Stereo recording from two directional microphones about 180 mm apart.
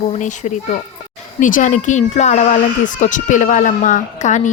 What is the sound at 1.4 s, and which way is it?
A woman's voice, 45° left (ahead or behind).